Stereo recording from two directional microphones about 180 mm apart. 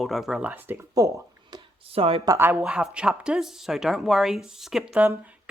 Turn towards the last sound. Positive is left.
turn(degrees=-5)  # may be behind; listen again after turning